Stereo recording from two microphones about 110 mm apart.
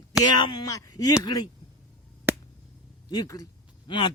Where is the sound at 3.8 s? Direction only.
45° left (ahead or behind).